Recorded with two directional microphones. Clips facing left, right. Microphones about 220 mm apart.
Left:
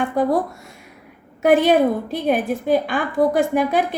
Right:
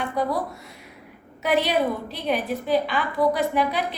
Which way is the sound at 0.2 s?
50° left (ahead or behind).